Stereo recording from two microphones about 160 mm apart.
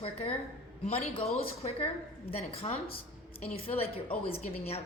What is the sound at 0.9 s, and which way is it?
Speech, 40° left (ahead or behind).